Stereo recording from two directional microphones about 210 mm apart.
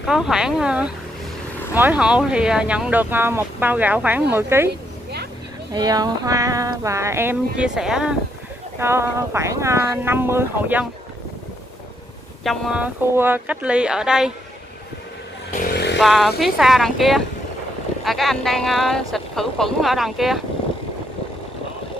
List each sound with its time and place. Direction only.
0.0 s speech: centre (ahead or behind)
5.7 s speech: 20° right (ahead or behind)
12.4 s speech: 5° right (ahead or behind)
15.5 s chainsaw: 50° left (ahead or behind)
16.0 s speech: centre (ahead or behind)